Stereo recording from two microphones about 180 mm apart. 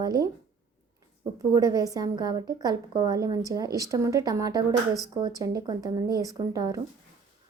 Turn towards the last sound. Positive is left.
turn(degrees=-20)  # may be behind; listen again after turning